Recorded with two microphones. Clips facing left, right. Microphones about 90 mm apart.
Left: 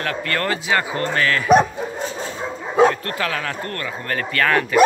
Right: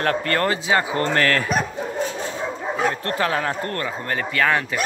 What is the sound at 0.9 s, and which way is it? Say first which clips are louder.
Speech: right 1 dB; 35° right (ahead or behind).